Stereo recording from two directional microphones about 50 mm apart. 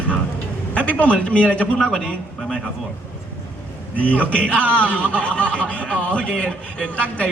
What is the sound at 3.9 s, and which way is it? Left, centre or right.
A man's voice, left.